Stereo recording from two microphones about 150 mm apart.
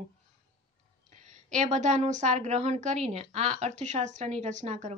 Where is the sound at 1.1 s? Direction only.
55° right (ahead or behind).